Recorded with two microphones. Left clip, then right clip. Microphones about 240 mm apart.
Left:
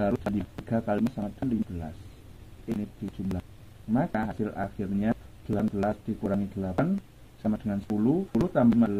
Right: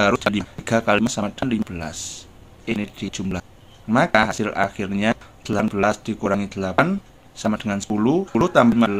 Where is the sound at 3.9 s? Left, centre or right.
Right.